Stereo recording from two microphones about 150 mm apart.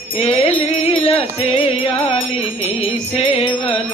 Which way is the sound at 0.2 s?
40° left (ahead or behind).